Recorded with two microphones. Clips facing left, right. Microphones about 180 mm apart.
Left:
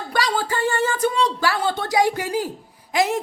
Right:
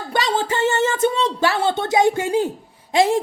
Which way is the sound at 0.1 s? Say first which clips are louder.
Right 2 dB; 25° right (ahead or behind).